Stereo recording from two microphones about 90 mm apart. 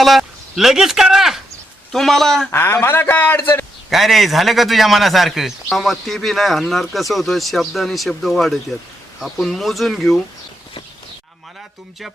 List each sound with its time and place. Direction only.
0.0 s a man's voice: centre (ahead or behind)
2.5 s a man's voice: 25° left (ahead or behind)
3.8 s a man's voice: centre (ahead or behind)